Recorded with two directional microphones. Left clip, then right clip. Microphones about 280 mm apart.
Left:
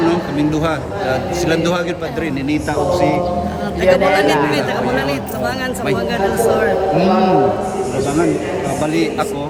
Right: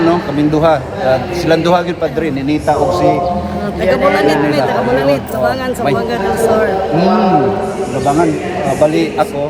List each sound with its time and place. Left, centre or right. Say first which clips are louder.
0.1 s a man's voice: right 4 dB; centre
3.8 s a man's voice: right 1 dB; centre
6.4 s a man's voice: right 2 dB; centre
8.8 s a man's voice: right 7 dB; centre